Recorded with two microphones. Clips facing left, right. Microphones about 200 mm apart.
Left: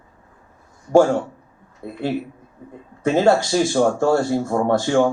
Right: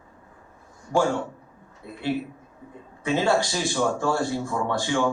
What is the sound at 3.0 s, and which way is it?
Speech, 45° left (ahead or behind).